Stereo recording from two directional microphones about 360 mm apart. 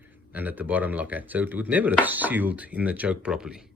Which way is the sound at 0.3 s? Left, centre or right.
Centre.